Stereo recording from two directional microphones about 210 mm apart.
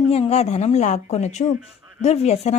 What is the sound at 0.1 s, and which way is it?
A woman's voice, 30° left (ahead or behind).